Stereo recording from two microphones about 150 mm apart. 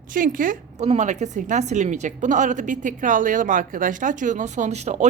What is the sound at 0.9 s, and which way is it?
A woman's voice, 50° right (ahead or behind).